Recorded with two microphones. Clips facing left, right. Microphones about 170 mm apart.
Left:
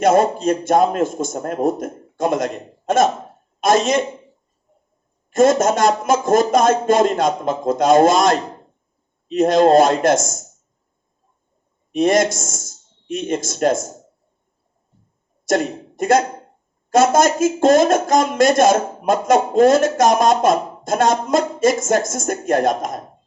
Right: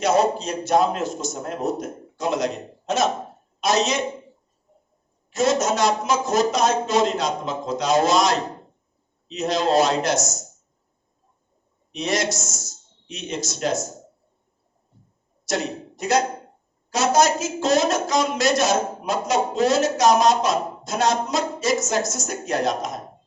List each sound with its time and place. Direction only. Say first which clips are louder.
0.0 s speech: left 5 dB; 50° left (ahead or behind)
5.3 s speech: left 6 dB; 50° left (ahead or behind)
11.9 s speech: left 9 dB; 50° left (ahead or behind)
15.4 s a sound: left 7 dB; 50° left (ahead or behind)
16.9 s speech: left 5 dB; 50° left (ahead or behind)